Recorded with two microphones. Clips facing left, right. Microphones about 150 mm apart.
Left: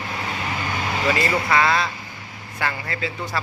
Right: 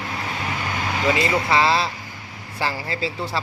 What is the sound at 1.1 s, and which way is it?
Speech, 20° right (ahead or behind).